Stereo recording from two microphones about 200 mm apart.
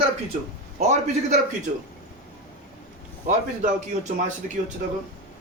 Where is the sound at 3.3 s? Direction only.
35° right (ahead or behind).